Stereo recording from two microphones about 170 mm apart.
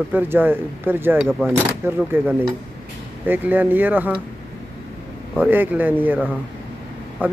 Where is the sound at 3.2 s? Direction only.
10° right (ahead or behind).